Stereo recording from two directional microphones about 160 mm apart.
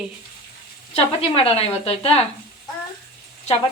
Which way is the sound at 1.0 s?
35° left (ahead or behind).